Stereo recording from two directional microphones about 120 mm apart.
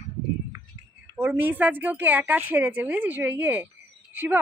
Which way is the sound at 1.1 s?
15° right (ahead or behind).